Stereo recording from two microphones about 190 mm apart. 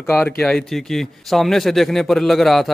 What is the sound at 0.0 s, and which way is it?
Speech, 15° left (ahead or behind).